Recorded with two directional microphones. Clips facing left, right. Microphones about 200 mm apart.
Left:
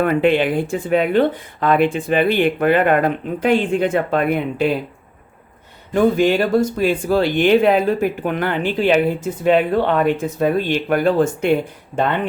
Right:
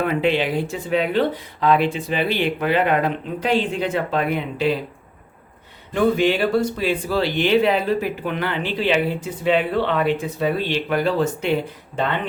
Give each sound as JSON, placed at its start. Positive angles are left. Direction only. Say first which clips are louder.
{"t": 0.0, "sound": "speech", "louder": "left 4 dB", "side_deg": 50}
{"t": 5.9, "sound": "speech", "louder": "left 3 dB", "side_deg": 45}